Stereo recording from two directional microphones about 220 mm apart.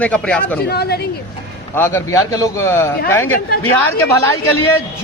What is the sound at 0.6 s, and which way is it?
Speech, 45° left (ahead or behind).